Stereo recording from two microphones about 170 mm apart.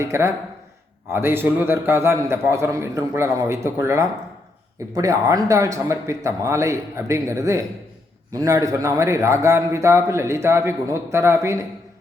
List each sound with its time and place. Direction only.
0.0 s a man's voice: 15° right (ahead or behind)